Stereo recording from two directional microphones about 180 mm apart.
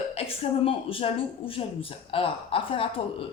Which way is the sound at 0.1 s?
35° left (ahead or behind).